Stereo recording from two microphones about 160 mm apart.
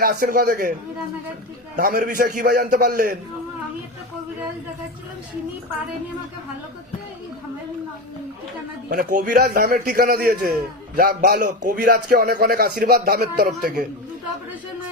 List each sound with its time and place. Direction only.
0.0 s a man's voice: 65° right (ahead or behind)
1.7 s a man's voice: 65° right (ahead or behind)
8.9 s a man's voice: 60° right (ahead or behind)